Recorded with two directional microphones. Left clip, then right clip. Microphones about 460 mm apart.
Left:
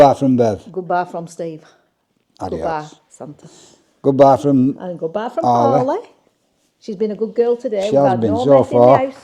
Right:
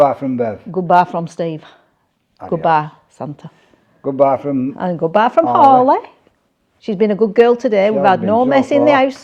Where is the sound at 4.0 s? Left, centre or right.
Left.